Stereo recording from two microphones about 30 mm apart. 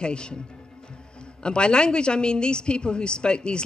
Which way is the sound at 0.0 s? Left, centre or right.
Left.